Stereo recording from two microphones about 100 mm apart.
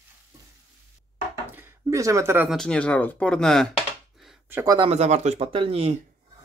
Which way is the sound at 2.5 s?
5° left (ahead or behind).